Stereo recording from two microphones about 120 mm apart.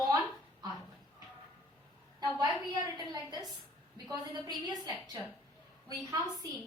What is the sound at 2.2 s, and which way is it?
A woman's voice, 35° right (ahead or behind).